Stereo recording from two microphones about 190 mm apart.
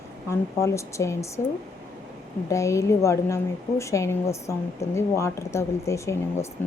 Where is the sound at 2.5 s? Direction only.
15° left (ahead or behind).